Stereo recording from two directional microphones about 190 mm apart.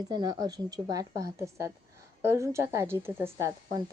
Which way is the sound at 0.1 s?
20° right (ahead or behind).